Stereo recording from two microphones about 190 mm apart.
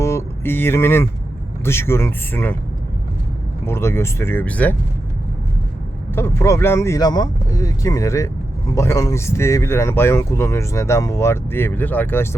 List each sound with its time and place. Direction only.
0.0 s a sound: 15° left (ahead or behind)
1.6 s speech: 15° left (ahead or behind)
3.7 s speech: 15° left (ahead or behind)
6.1 s speech: 15° left (ahead or behind)